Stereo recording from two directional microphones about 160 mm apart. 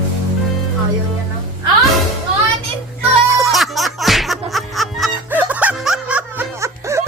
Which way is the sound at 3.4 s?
Centre (ahead or behind).